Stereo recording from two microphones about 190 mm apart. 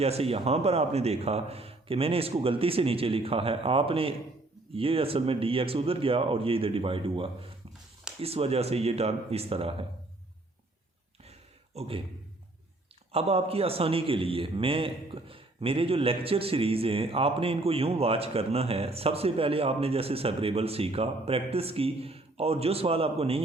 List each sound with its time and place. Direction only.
0.0 s a man's voice: 30° right (ahead or behind)
11.3 s a sound: 35° right (ahead or behind)
13.1 s a man's voice: 30° right (ahead or behind)